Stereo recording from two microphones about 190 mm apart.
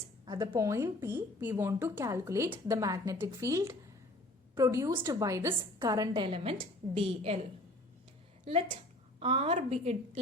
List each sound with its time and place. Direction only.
0.3 s a woman's voice: 20° right (ahead or behind)
8.4 s a woman's voice: 30° right (ahead or behind)